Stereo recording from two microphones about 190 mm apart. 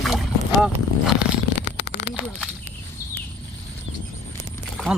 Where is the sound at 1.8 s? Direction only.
65° left (ahead or behind).